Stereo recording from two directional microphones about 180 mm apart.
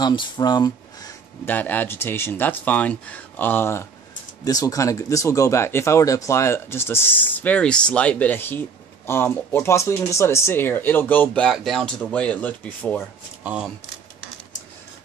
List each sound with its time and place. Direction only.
0.0 s speech: 25° left (ahead or behind); by 13.0 s 10° left (ahead or behind)
13.4 s speech: 5° right (ahead or behind)